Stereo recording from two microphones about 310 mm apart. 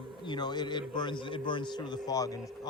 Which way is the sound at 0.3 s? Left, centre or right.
Centre.